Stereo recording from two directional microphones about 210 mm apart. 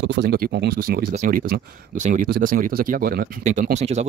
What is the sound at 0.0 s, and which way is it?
Speech, 55° right (ahead or behind).